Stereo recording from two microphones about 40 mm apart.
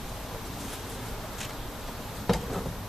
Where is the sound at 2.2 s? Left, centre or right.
Centre.